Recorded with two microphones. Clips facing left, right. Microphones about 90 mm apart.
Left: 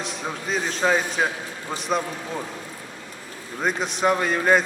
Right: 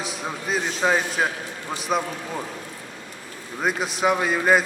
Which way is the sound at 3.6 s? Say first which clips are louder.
Even; 5° right (ahead or behind).